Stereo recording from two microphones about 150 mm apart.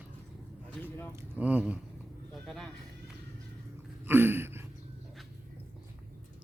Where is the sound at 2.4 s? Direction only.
5° left (ahead or behind).